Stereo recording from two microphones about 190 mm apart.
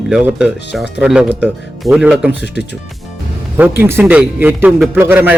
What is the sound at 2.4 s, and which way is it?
Speech, 65° left (ahead or behind).